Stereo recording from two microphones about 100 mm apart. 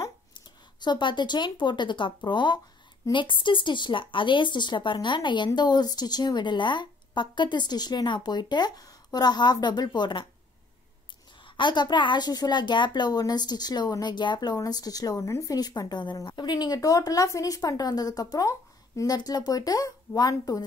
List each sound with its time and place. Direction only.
0.7 s speech: 50° left (ahead or behind)
11.4 s a woman's voice: 50° left (ahead or behind)